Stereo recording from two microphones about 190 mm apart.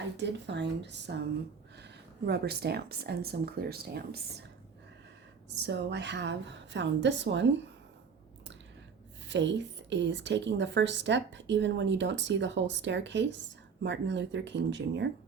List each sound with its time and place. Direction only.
0.2 s speech: 65° right (ahead or behind)
5.5 s a woman's voice: 65° right (ahead or behind)
9.2 s a woman's voice: 70° right (ahead or behind)